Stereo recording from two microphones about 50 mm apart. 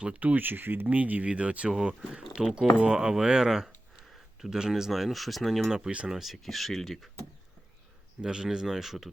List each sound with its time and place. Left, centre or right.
0.0 s speech: right
0.3 s speech: right
0.9 s speech: right; by 6.3 s centre
6.3 s speech: centre
8.2 s speech: centre